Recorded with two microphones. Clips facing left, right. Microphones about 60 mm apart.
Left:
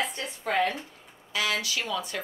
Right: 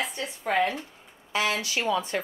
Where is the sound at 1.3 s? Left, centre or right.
Right.